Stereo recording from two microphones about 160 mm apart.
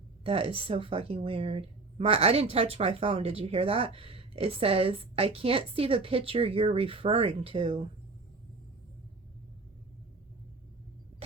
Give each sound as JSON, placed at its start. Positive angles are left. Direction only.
{"t": 0.3, "sound": "a woman's voice", "side_deg": -35}